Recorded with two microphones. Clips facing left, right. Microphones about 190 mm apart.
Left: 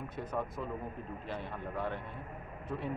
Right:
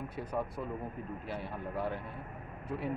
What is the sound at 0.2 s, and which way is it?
Speech, 10° right (ahead or behind).